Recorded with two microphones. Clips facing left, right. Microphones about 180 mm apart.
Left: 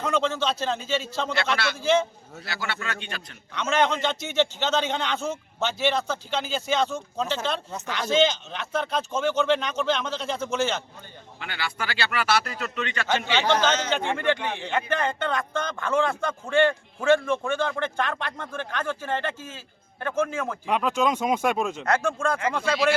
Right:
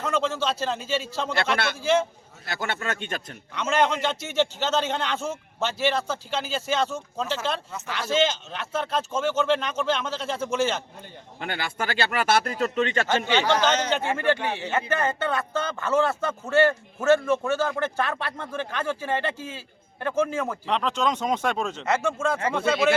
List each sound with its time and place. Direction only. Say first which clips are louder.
0.0 s a man's voice: left 1 dB; 5° right (ahead or behind)
1.5 s speech: right 1 dB; 50° right (ahead or behind)
1.8 s a man's voice: left 1 dB; 10° right (ahead or behind)
2.5 s speech: right 3 dB; 50° right (ahead or behind)
3.5 s a man's voice: even; 10° right (ahead or behind)
11.3 s speech: right 3 dB; 45° right (ahead or behind)
13.5 s a man's voice: left 1 dB; 15° right (ahead or behind)
20.7 s speech: left 3 dB; 10° left (ahead or behind)
21.8 s speech: right 1 dB; 5° right (ahead or behind)